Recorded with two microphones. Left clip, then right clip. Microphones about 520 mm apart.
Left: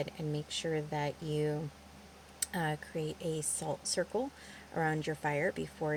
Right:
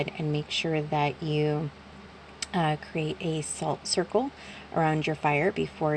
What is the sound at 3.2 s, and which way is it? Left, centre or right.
Speech, left.